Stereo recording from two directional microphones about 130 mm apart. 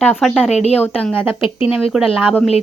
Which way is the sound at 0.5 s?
55° left (ahead or behind).